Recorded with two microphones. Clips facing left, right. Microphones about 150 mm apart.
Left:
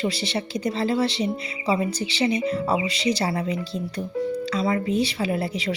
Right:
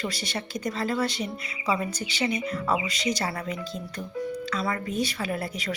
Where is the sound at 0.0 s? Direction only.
30° left (ahead or behind).